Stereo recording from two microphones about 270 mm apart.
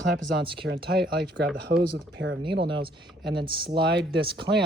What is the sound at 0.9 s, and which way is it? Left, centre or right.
Speech, right.